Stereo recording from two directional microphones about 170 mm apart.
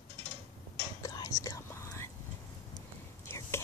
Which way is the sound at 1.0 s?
20° left (ahead or behind).